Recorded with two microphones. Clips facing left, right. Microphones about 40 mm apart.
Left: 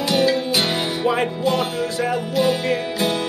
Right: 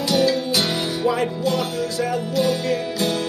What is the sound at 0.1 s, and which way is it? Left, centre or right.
Music, left.